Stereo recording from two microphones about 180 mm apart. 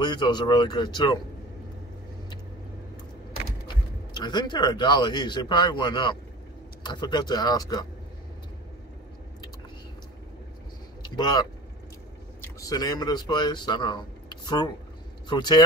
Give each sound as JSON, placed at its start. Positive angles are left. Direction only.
{"t": 0.0, "sound": "speech", "side_deg": 25}
{"t": 3.6, "sound": "speech", "side_deg": 25}
{"t": 11.0, "sound": "a sound", "side_deg": 25}
{"t": 12.5, "sound": "speech", "side_deg": 20}